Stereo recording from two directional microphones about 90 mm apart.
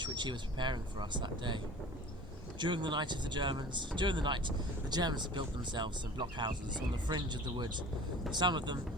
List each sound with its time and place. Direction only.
0.0 s speech: 60° right (ahead or behind)